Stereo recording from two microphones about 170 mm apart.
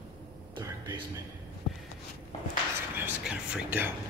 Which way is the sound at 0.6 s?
20° right (ahead or behind).